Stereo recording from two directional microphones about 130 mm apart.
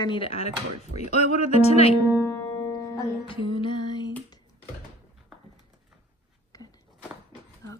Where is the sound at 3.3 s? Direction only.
40° left (ahead or behind).